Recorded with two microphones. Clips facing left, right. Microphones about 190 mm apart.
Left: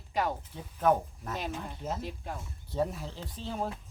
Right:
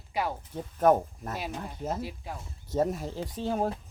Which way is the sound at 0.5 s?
45° right (ahead or behind).